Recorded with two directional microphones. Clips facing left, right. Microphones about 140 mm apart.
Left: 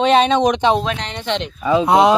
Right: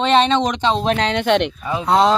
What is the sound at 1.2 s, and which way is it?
Speech, 55° right (ahead or behind).